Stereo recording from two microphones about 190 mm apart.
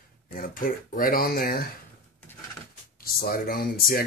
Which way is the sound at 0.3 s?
50° left (ahead or behind).